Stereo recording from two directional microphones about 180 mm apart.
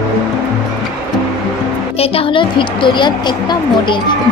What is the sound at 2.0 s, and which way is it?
A woman's voice, 30° left (ahead or behind).